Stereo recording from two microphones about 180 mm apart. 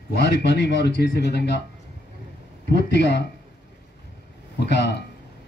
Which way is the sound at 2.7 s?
70° left (ahead or behind).